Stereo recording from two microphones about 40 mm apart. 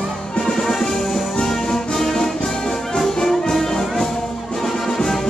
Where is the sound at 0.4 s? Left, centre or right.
Centre.